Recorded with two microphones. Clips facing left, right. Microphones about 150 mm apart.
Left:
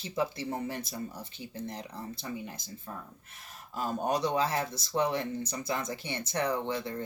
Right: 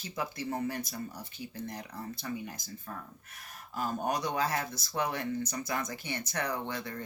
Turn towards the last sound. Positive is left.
turn(degrees=25)  # may be behind; listen again after turning